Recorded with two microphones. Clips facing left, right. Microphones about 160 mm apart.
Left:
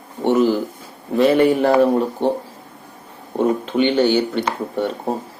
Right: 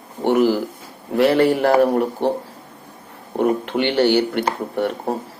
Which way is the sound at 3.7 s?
15° left (ahead or behind).